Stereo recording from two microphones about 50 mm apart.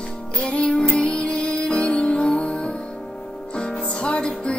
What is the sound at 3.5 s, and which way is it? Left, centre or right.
Music, centre.